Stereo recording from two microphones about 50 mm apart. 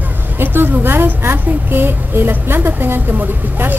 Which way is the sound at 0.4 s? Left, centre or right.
Right.